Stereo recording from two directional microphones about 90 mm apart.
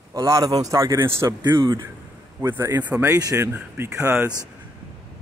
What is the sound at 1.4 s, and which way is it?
Speech, 55° right (ahead or behind).